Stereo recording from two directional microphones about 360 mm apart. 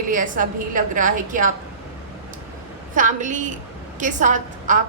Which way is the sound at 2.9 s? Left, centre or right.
Right.